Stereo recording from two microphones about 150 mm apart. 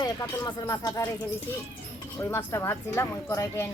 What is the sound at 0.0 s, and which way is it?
Speech, 25° left (ahead or behind).